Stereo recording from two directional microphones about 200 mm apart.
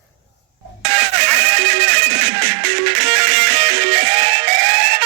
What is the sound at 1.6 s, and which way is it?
Music, 70° right (ahead or behind).